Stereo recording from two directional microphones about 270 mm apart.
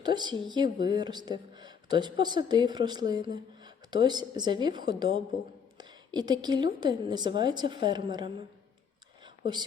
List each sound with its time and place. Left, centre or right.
0.0 s speech: centre
5.7 s a sound: centre
6.7 s speech: centre